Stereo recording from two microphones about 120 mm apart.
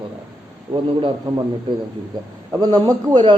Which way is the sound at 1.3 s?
35° right (ahead or behind).